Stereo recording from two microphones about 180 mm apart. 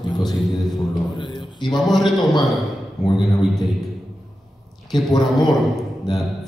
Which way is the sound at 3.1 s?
Centre (ahead or behind).